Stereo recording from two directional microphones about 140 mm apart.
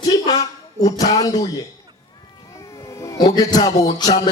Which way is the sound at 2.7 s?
20° left (ahead or behind).